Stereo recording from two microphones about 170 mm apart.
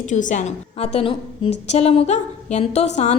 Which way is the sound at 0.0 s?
45° left (ahead or behind).